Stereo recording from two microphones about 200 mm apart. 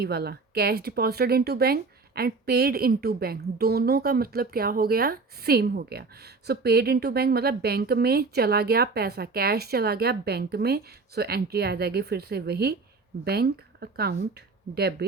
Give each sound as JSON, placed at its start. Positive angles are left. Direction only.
{"t": 0.0, "sound": "speech", "side_deg": -55}